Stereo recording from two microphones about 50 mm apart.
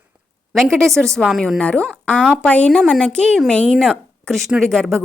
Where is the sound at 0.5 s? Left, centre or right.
Centre.